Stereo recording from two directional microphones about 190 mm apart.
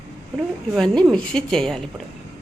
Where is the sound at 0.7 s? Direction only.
Centre (ahead or behind).